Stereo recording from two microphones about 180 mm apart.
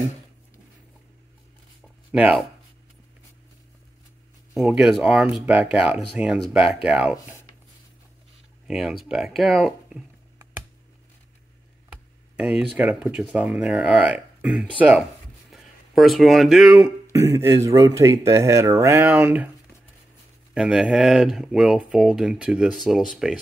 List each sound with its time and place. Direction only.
2.1 s speech: 5° right (ahead or behind)
4.6 s speech: 5° right (ahead or behind)
8.6 s speech: centre (ahead or behind)
11.9 s speech: 5° right (ahead or behind)
17.1 s speech: 15° right (ahead or behind)
20.5 s speech: 5° right (ahead or behind)